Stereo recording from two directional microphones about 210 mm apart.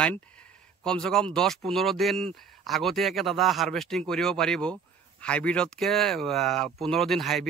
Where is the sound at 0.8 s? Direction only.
5° left (ahead or behind).